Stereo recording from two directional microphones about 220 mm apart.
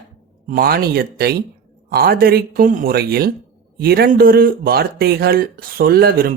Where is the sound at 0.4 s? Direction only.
45° right (ahead or behind).